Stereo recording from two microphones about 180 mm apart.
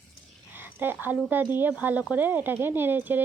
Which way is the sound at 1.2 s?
10° right (ahead or behind).